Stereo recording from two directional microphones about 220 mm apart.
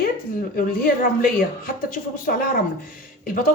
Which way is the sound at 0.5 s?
45° left (ahead or behind).